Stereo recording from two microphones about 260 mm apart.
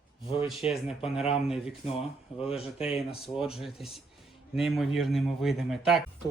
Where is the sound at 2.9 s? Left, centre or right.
Centre.